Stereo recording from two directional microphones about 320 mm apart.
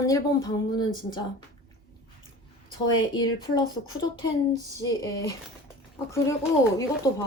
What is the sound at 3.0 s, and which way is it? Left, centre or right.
Speech, centre.